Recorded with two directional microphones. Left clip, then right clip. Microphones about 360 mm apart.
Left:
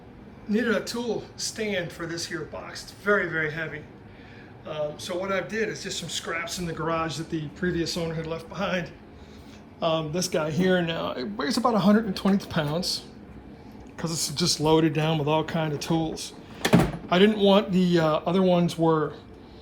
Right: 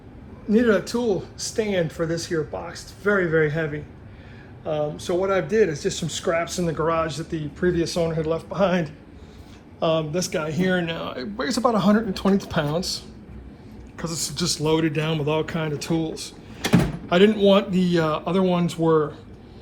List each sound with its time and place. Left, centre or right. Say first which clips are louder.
0.5 s speech: right 6 dB; centre
9.9 s speech: right 3 dB; centre
14.0 s speech: even; centre
15.8 s speech: right 2 dB; left
17.7 s speech: right 1 dB; left
17.9 s speech: right 1 dB; centre